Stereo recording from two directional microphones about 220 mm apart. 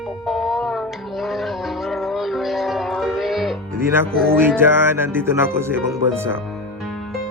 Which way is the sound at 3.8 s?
10° right (ahead or behind).